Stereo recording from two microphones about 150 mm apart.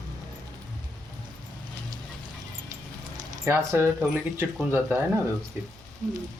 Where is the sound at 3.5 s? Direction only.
15° right (ahead or behind).